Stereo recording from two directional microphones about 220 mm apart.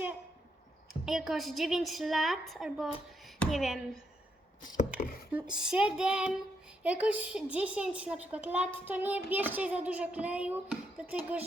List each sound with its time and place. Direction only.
0.9 s a woman's voice: centre (ahead or behind)
5.3 s a woman's voice: 5° right (ahead or behind)